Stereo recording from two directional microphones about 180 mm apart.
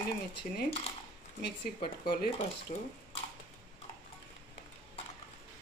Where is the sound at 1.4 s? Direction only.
60° left (ahead or behind).